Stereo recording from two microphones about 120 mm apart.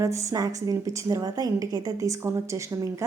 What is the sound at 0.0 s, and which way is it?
A woman's voice, 25° right (ahead or behind).